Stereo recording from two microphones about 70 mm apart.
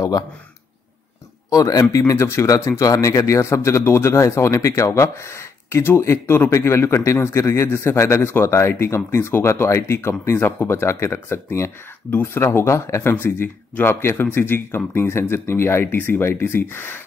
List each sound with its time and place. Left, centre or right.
1.5 s speech: left